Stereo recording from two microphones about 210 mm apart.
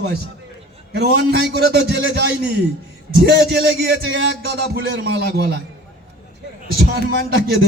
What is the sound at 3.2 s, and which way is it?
A man's voice, 50° right (ahead or behind).